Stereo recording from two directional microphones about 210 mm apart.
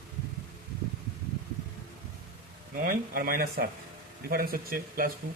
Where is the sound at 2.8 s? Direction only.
45° right (ahead or behind).